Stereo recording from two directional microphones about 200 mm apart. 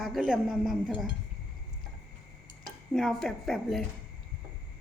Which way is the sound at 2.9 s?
Centre (ahead or behind).